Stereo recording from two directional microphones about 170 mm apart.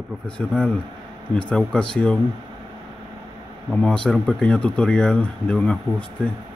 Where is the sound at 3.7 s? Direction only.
5° left (ahead or behind).